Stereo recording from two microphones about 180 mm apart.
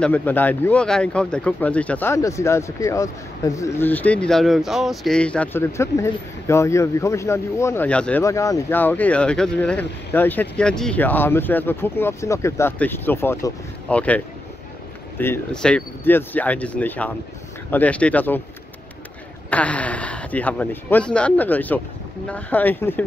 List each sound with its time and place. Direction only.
0.0 s speech: 10° left (ahead or behind)
19.5 s speech: 5° left (ahead or behind)